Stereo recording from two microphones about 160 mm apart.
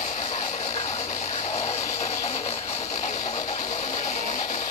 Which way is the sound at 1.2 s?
55° left (ahead or behind).